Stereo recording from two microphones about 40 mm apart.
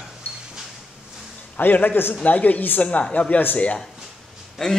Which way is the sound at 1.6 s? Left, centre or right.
Left.